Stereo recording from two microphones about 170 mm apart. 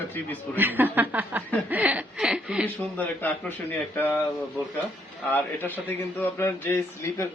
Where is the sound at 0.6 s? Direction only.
10° right (ahead or behind).